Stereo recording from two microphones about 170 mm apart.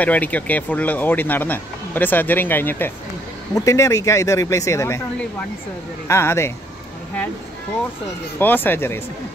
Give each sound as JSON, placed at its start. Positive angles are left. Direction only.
{"t": 0.0, "sound": "speech", "side_deg": 10}
{"t": 6.0, "sound": "speech", "side_deg": 15}
{"t": 8.4, "sound": "speech", "side_deg": 10}